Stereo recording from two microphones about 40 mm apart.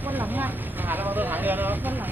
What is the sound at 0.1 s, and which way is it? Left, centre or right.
Vehicle, right.